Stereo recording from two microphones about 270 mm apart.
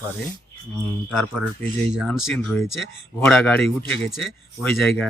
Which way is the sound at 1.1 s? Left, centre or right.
Centre.